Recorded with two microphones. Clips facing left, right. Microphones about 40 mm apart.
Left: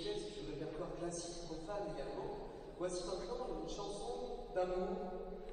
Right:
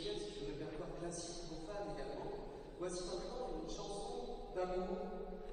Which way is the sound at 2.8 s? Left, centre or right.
Left.